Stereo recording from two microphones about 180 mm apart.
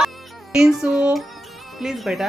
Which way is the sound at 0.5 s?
5° right (ahead or behind).